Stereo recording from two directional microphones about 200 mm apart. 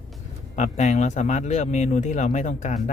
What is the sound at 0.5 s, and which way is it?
Speech, 35° left (ahead or behind).